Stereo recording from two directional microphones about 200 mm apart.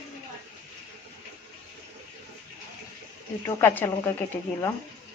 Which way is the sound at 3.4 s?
10° left (ahead or behind).